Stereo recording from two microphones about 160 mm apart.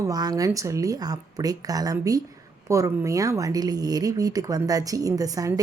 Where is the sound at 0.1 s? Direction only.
25° right (ahead or behind).